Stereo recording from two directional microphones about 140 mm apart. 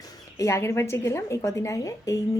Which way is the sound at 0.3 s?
20° left (ahead or behind).